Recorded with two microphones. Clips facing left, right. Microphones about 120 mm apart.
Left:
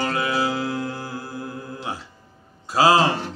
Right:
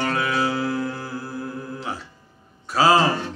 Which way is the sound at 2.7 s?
10° left (ahead or behind).